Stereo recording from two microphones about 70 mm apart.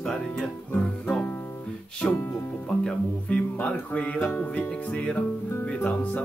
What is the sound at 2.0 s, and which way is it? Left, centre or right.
Speech, centre.